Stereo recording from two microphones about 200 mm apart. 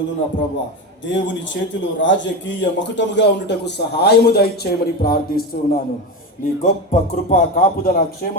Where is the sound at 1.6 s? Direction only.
60° left (ahead or behind).